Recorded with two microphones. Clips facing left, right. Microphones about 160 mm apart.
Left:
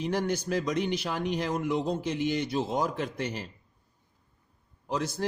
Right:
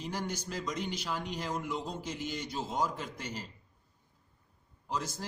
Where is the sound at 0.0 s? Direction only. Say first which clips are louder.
Left 8 dB; 60° left (ahead or behind).